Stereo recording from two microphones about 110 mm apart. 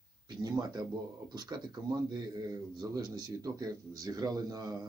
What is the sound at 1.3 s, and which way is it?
A man's voice, 40° right (ahead or behind).